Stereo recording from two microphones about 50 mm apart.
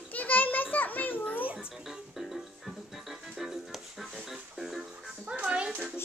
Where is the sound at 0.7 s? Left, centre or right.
Left.